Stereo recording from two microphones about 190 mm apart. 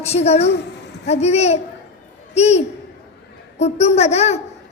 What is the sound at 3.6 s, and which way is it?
Child singing, 35° left (ahead or behind).